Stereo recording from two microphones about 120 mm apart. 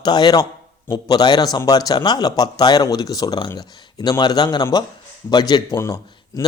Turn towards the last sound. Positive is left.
turn(degrees=25)  # may be behind; listen again after turning